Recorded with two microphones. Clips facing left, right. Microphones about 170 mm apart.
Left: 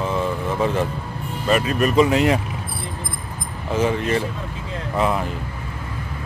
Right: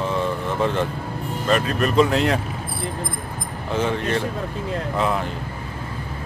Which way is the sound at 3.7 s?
5° left (ahead or behind).